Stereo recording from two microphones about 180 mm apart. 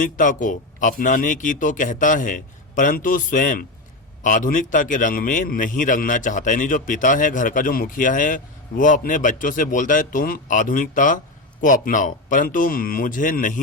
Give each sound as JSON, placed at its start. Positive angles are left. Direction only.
{"t": 0.0, "sound": "a man's voice", "side_deg": 45}